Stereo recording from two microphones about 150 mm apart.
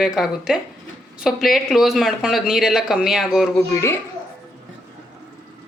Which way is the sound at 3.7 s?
20° left (ahead or behind).